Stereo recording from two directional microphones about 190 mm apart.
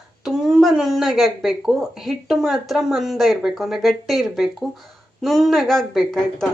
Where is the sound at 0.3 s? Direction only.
Centre (ahead or behind).